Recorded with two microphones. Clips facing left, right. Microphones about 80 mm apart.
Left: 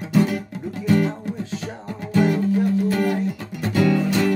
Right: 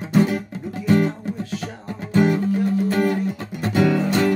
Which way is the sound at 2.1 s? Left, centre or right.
Right.